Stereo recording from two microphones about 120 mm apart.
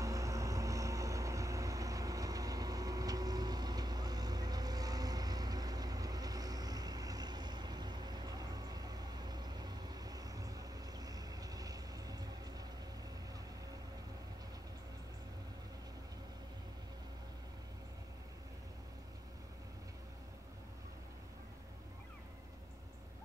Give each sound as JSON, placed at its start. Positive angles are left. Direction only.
{"t": 0.0, "sound": "vehicle", "side_deg": -25}